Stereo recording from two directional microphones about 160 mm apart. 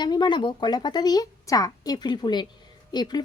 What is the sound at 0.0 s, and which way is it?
A woman's voice, 30° left (ahead or behind).